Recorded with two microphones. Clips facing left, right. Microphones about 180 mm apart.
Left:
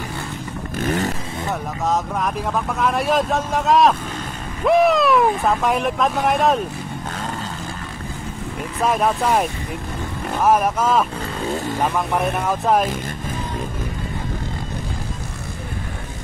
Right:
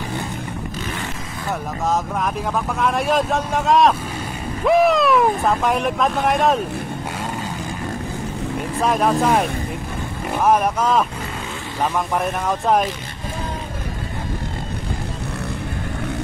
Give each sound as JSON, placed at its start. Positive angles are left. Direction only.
{"t": 0.7, "sound": "vehicle", "side_deg": 45}
{"t": 1.9, "sound": "speech", "side_deg": 0}
{"t": 8.8, "sound": "speech", "side_deg": 0}